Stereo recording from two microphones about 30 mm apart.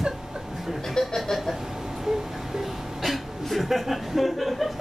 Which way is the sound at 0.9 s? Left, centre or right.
Centre.